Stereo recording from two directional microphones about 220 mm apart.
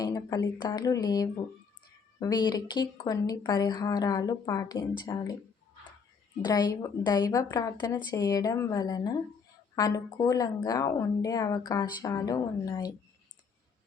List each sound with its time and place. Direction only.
0.0 s speech: 15° left (ahead or behind)
6.4 s speech: 15° left (ahead or behind)